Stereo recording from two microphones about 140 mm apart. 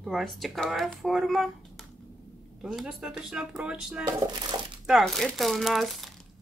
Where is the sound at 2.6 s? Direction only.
5° right (ahead or behind).